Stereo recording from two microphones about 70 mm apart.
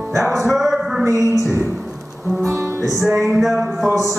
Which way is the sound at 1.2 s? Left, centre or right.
Left.